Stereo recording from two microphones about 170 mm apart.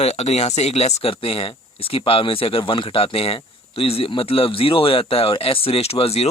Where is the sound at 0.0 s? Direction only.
40° left (ahead or behind).